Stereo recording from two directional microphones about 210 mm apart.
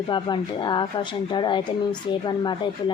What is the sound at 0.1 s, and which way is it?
Speech, 20° left (ahead or behind).